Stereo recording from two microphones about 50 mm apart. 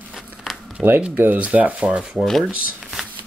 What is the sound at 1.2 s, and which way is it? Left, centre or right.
Speech, right.